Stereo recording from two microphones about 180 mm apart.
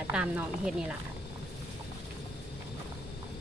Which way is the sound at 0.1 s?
5° right (ahead or behind).